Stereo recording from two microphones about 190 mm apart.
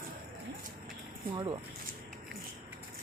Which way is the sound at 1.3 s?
25° right (ahead or behind).